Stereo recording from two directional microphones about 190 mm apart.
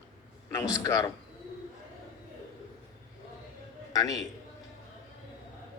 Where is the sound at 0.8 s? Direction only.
15° left (ahead or behind).